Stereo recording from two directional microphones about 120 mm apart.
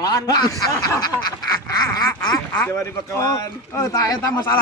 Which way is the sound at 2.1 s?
20° left (ahead or behind).